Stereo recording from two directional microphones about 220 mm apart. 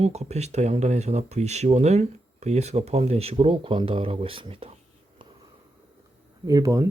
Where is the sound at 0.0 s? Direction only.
30° right (ahead or behind).